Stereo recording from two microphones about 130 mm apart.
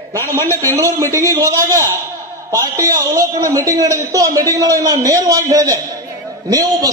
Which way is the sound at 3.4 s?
25° right (ahead or behind).